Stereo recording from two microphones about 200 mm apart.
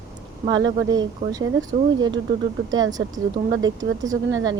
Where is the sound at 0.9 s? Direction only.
20° right (ahead or behind).